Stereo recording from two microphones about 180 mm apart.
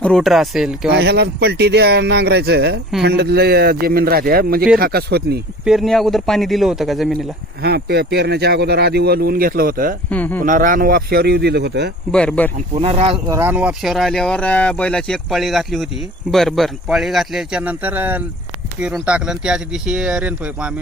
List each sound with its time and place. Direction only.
0.0 s speech: centre (ahead or behind)
0.9 s speech: 65° right (ahead or behind)
5.6 s speech: centre (ahead or behind)
7.6 s speech: 65° right (ahead or behind)
10.1 s speech: 10° left (ahead or behind)
10.4 s speech: 45° right (ahead or behind); by 11.9 s 70° right (ahead or behind)
12.1 s speech: 5° left (ahead or behind)
12.7 s speech: 35° right (ahead or behind)
13.2 s speech: 15° right (ahead or behind)